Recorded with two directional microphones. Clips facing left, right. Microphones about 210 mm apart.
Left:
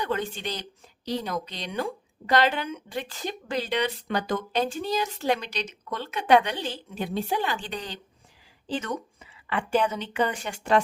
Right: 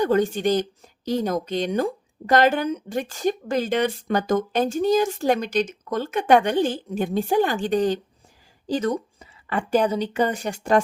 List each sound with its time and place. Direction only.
0.0 s a woman's voice: 45° right (ahead or behind)